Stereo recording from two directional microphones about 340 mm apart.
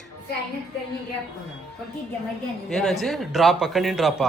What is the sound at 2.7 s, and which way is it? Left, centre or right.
A man's voice, centre.